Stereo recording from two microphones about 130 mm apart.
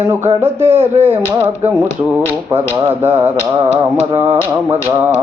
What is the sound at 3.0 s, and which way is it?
Mantra, 15° right (ahead or behind).